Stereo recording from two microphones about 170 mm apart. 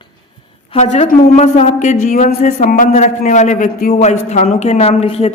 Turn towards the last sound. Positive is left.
turn(degrees=35)  # may be behind; listen again after turning